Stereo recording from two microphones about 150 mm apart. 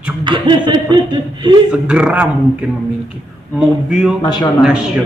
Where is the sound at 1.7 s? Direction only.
5° right (ahead or behind).